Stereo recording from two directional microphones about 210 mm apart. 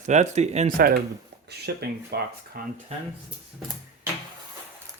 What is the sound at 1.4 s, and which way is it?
Speech, 50° right (ahead or behind).